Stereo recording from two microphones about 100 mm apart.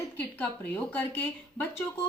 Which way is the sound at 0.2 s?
15° left (ahead or behind).